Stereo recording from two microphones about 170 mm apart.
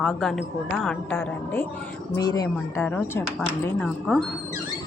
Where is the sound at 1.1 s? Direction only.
10° left (ahead or behind).